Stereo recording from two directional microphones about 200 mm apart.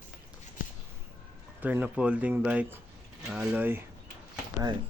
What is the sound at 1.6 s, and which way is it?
Speech, 10° right (ahead or behind).